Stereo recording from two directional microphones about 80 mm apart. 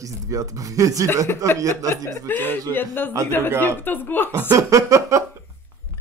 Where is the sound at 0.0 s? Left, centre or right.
Right.